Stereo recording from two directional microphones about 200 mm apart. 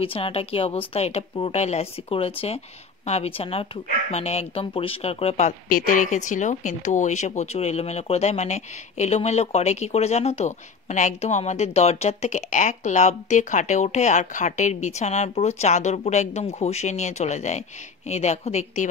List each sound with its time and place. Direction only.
0.0 s a woman's voice: 30° left (ahead or behind)
5.7 s speech: 45° left (ahead or behind)